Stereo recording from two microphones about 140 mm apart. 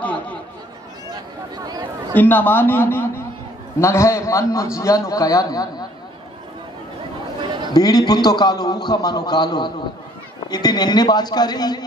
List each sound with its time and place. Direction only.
0.0 s chatter: 10° left (ahead or behind)
1.1 s a sound: 30° right (ahead or behind)
2.1 s a man's voice: 15° left (ahead or behind)
7.4 s chatter: 35° right (ahead or behind)
7.7 s a man's voice: 30° left (ahead or behind)